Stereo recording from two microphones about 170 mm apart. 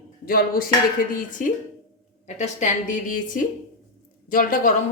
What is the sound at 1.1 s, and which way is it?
A woman's voice, 50° left (ahead or behind).